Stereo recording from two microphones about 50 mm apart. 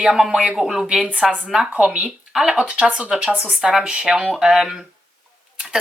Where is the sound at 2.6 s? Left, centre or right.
Right.